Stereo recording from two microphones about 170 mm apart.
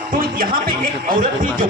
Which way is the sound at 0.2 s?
60° right (ahead or behind).